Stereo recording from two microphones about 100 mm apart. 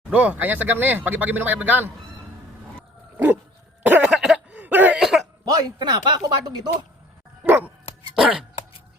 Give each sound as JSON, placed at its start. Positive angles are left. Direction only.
{"t": 0.1, "sound": "speech", "side_deg": -15}
{"t": 3.8, "sound": "cough", "side_deg": -15}
{"t": 4.1, "sound": "a sound", "side_deg": -5}
{"t": 4.6, "sound": "cough", "side_deg": -20}
{"t": 4.9, "sound": "cough", "side_deg": -5}
{"t": 5.5, "sound": "speech", "side_deg": -40}
{"t": 7.4, "sound": "dog", "side_deg": -20}
{"t": 8.2, "sound": "speech", "side_deg": -10}